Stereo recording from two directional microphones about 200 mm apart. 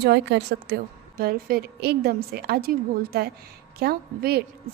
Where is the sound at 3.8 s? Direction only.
50° right (ahead or behind).